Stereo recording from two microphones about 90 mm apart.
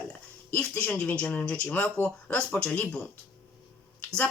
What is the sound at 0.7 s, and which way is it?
Speech, 15° left (ahead or behind).